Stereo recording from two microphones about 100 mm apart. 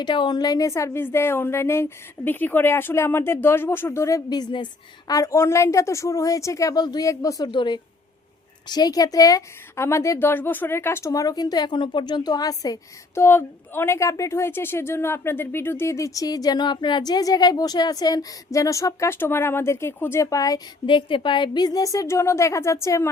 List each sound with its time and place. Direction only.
0.0 s a woman's voice: 50° left (ahead or behind); by 4.4 s 30° left (ahead or behind)
4.4 s a woman's voice: 45° left (ahead or behind)
7.5 s a woman's voice: 50° left (ahead or behind)
9.7 s a woman's voice: 25° left (ahead or behind)
13.1 s a woman's voice: 25° left (ahead or behind)
20.8 s a woman's voice: 55° left (ahead or behind); by 23.0 s 30° left (ahead or behind)